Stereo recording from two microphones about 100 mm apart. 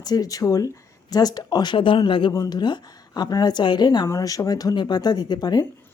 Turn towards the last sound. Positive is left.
turn(degrees=45)  # may be behind; listen again after turning